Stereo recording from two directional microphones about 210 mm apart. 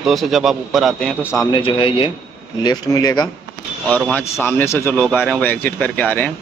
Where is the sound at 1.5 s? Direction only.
25° left (ahead or behind); by 6.3 s 5° left (ahead or behind).